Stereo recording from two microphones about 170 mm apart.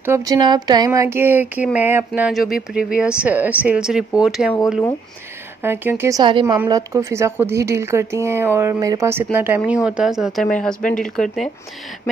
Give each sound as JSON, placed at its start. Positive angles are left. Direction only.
{"t": 0.0, "sound": "speech", "side_deg": -20}
{"t": 5.6, "sound": "speech", "side_deg": -15}